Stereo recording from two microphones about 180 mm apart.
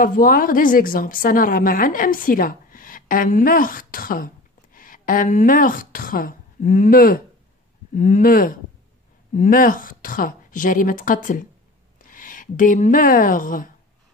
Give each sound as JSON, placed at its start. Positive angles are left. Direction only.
{"t": 0.0, "sound": "a woman's voice", "side_deg": 50}